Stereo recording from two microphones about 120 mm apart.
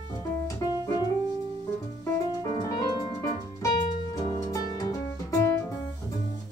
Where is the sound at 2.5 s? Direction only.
40° left (ahead or behind).